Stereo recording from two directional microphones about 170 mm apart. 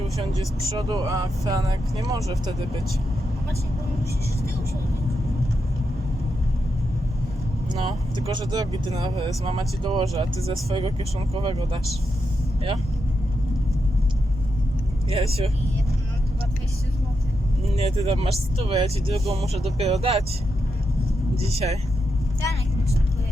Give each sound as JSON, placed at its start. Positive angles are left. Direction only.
{"t": 0.7, "sound": "speech", "side_deg": -25}
{"t": 7.7, "sound": "speech", "side_deg": -25}
{"t": 15.1, "sound": "speech", "side_deg": -35}
{"t": 17.7, "sound": "speech", "side_deg": -35}
{"t": 21.4, "sound": "speech", "side_deg": -40}
{"t": 22.4, "sound": "vehicle", "side_deg": 20}